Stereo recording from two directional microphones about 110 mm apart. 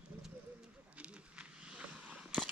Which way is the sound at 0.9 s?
10° right (ahead or behind).